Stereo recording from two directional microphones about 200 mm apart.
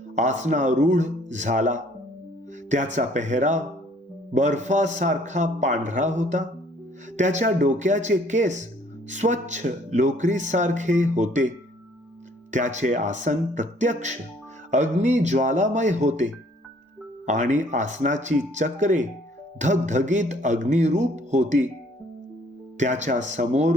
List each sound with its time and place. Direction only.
0.2 s speech: 35° right (ahead or behind)
22.8 s speech: 35° right (ahead or behind)